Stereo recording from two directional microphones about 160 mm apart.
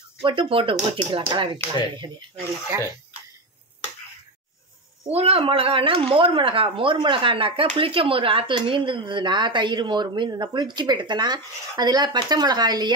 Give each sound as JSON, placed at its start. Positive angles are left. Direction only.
{"t": 0.2, "sound": "speech", "side_deg": -30}
{"t": 5.0, "sound": "speech", "side_deg": -40}